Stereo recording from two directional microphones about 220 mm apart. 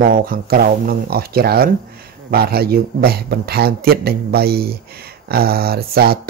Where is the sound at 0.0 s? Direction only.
40° right (ahead or behind).